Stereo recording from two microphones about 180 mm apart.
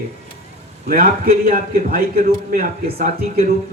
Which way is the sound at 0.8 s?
55° right (ahead or behind).